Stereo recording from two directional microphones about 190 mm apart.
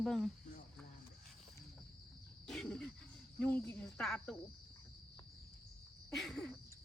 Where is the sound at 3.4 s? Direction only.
10° left (ahead or behind).